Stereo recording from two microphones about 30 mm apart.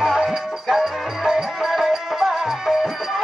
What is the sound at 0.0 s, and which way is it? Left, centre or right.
Music, centre.